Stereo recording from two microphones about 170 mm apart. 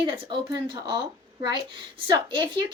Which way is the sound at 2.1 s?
25° right (ahead or behind).